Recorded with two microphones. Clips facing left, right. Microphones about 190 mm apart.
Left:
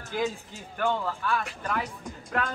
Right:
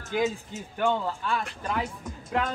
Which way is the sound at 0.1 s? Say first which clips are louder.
Right 3 dB; 20° right (ahead or behind).